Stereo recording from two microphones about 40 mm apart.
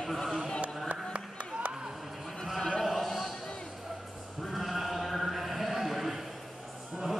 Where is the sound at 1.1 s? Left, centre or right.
Right.